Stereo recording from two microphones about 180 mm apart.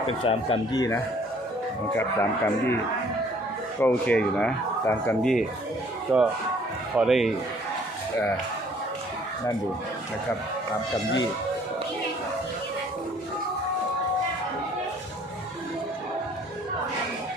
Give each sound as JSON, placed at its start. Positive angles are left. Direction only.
{"t": 0.3, "sound": "speech", "side_deg": 30}
{"t": 3.8, "sound": "speech", "side_deg": 10}